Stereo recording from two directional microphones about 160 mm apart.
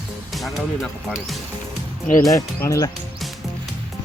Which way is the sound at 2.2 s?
20° left (ahead or behind).